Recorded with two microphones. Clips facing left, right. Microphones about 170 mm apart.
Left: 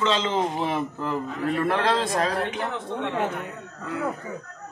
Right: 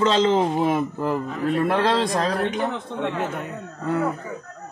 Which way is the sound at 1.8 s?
35° right (ahead or behind).